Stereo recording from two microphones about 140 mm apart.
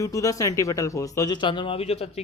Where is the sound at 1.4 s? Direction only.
35° left (ahead or behind).